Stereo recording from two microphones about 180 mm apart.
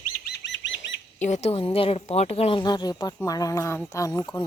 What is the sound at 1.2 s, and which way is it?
Speech, 40° left (ahead or behind).